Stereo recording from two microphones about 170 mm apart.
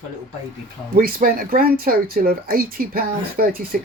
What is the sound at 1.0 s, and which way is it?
Speech, 55° right (ahead or behind).